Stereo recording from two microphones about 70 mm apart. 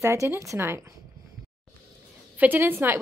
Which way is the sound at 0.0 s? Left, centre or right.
Right.